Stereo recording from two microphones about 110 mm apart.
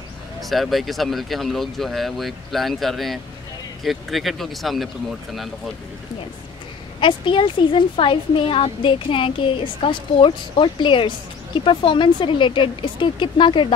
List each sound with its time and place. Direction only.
0.4 s speech: centre (ahead or behind)
7.0 s speech: 50° left (ahead or behind)